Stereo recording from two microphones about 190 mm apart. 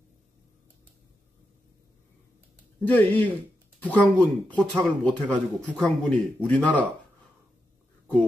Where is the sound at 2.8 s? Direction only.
10° left (ahead or behind).